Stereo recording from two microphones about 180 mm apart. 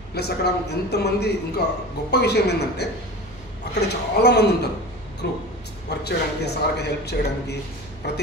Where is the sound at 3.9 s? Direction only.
65° left (ahead or behind).